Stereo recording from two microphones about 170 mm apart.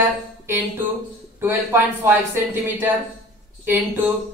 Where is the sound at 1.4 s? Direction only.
15° right (ahead or behind).